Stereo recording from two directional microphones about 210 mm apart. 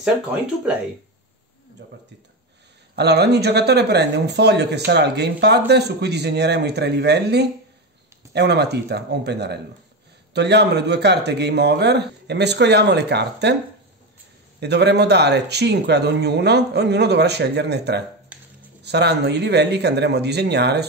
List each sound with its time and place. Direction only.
1.8 s speech: 55° right (ahead or behind)
3.0 s speech: 55° right (ahead or behind)
14.6 s speech: 55° right (ahead or behind)